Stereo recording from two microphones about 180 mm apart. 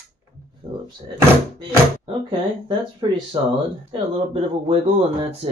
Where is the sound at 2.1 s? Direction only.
30° right (ahead or behind).